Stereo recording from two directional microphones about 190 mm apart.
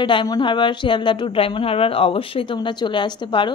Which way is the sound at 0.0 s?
25° left (ahead or behind).